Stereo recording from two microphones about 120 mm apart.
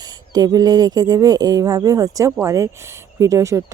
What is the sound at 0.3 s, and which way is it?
Speech, 35° right (ahead or behind).